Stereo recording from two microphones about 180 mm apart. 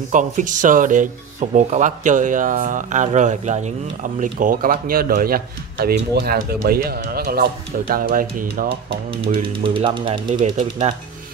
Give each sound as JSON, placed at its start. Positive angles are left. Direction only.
{"t": 0.1, "sound": "speech", "side_deg": -45}
{"t": 8.6, "sound": "speech", "side_deg": -30}